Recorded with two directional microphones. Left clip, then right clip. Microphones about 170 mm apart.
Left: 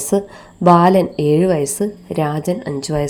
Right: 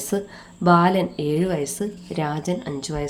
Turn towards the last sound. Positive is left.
turn(degrees=30)  # may be behind; listen again after turning